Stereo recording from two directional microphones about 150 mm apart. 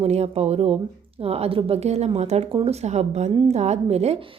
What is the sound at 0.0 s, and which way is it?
A woman's voice, 45° right (ahead or behind).